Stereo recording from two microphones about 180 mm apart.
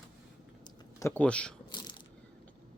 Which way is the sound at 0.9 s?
15° left (ahead or behind).